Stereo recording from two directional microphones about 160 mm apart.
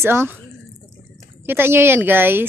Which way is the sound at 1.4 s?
15° right (ahead or behind).